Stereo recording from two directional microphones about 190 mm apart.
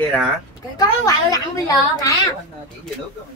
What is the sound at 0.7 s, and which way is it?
Speech, 20° left (ahead or behind).